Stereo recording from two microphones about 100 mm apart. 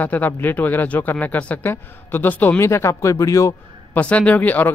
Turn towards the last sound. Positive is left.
turn(degrees=15)  # may be behind; listen again after turning